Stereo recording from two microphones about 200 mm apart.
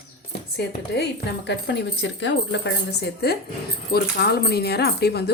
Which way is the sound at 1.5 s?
60° left (ahead or behind).